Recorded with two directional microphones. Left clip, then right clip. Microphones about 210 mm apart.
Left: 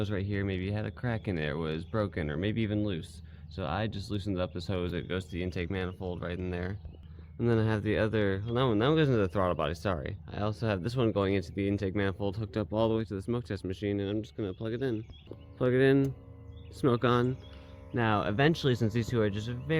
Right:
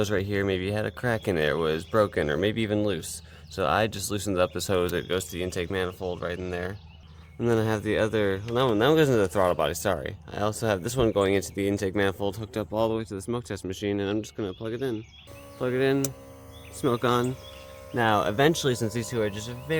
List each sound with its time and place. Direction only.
0.0 s speech: 35° right (ahead or behind)
14.4 s speech: 15° right (ahead or behind)
15.5 s speech: centre (ahead or behind)
16.8 s speech: 15° right (ahead or behind)